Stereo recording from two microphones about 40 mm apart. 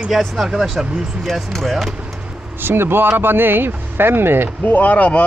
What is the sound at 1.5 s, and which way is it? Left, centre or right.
Speech, centre.